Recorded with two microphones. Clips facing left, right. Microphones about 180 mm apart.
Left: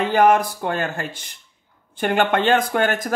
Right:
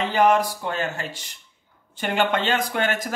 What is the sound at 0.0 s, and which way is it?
Speech, 50° left (ahead or behind).